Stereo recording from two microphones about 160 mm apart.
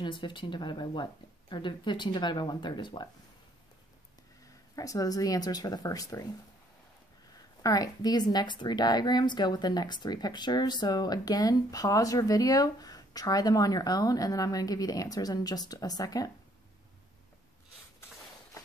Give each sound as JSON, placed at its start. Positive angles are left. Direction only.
{"t": 0.0, "sound": "a woman's voice", "side_deg": 30}
{"t": 4.7, "sound": "a woman's voice", "side_deg": 20}
{"t": 7.6, "sound": "a woman's voice", "side_deg": 25}